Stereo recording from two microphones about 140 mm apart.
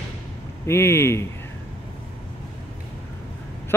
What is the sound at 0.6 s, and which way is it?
Speech, 15° left (ahead or behind).